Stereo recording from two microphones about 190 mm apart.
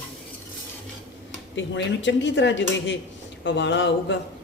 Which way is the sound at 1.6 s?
70° left (ahead or behind).